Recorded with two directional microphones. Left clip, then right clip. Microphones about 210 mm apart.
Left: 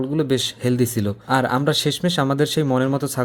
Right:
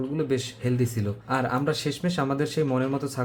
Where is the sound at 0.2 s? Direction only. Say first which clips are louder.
Left 7 dB; 40° left (ahead or behind).